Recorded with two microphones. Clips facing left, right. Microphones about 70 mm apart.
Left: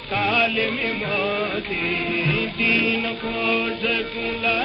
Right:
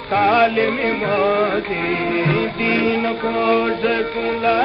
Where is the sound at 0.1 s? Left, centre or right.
Right.